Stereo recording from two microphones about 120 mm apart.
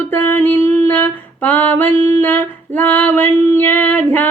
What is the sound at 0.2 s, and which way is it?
Female singing, 15° left (ahead or behind).